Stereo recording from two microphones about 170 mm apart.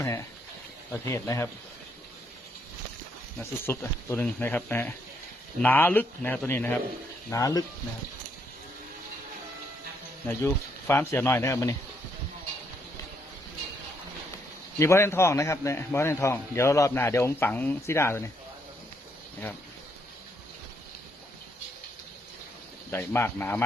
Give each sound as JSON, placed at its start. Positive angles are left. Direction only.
{"t": 1.0, "sound": "a man's voice", "side_deg": 20}
{"t": 3.3, "sound": "a man's voice", "side_deg": 10}
{"t": 10.2, "sound": "a man's voice", "side_deg": 15}
{"t": 14.8, "sound": "a man's voice", "side_deg": 15}
{"t": 22.9, "sound": "a man's voice", "side_deg": 15}